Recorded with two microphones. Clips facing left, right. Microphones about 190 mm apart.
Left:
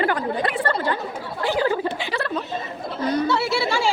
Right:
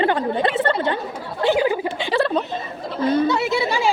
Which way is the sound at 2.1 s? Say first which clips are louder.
Right 6 dB; 30° right (ahead or behind).